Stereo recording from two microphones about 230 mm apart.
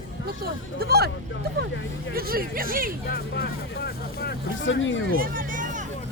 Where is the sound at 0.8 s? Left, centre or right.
Right.